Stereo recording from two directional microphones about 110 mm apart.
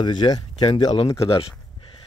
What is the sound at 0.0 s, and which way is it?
Speech, 45° left (ahead or behind).